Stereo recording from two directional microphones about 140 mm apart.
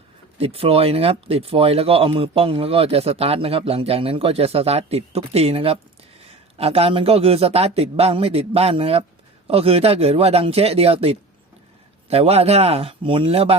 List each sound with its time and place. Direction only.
0.3 s speech: 45° right (ahead or behind)